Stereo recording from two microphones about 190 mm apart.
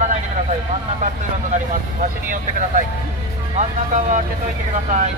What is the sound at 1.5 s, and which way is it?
Speech, 45° right (ahead or behind).